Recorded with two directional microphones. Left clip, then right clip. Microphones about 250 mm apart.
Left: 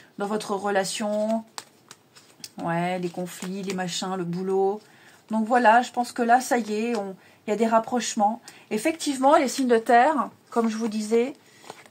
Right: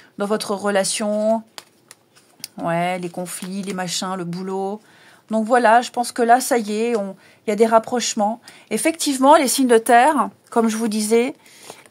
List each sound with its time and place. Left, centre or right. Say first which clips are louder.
0.2 s speech: right 5 dB; right
2.4 s speech: right 6 dB; right